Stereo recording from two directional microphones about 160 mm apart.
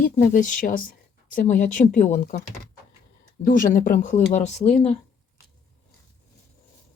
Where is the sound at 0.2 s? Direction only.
55° left (ahead or behind).